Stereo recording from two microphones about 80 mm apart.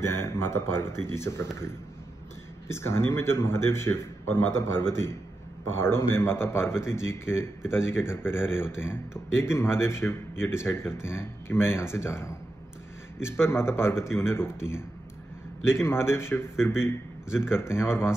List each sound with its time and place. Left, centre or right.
0.0 s a man's voice: left
2.7 s a man's voice: left